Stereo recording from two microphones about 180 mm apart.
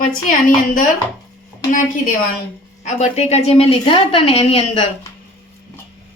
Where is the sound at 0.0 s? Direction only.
50° left (ahead or behind).